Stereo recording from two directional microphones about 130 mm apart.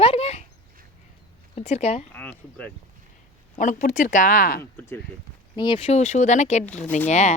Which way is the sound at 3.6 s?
80° left.